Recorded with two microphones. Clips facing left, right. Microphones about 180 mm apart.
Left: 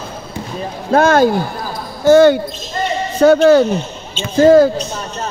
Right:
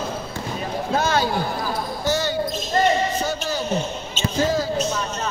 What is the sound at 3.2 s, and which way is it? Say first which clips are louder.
Speech: left 17 dB; 65° left (ahead or behind).